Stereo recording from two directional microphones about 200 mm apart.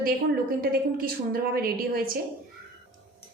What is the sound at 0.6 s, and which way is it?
A woman's voice, 45° right (ahead or behind).